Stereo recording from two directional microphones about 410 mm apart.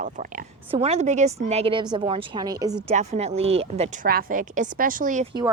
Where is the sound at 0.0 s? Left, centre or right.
Centre.